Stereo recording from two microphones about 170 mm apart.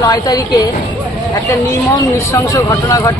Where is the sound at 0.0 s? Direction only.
25° left (ahead or behind).